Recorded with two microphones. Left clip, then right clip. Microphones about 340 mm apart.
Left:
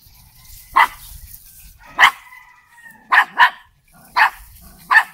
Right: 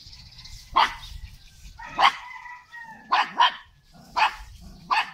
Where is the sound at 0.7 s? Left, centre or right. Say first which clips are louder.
Left 7 dB; left.